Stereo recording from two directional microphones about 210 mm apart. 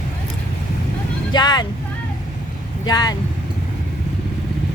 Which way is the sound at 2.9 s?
20° left (ahead or behind).